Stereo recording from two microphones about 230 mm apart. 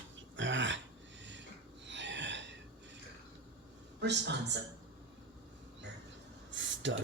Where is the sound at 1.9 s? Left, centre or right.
Right.